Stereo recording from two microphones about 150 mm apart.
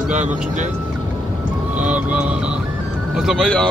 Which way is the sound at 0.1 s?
50° right (ahead or behind).